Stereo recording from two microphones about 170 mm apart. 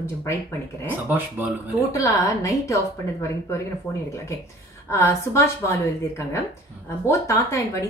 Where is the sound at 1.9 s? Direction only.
20° left (ahead or behind).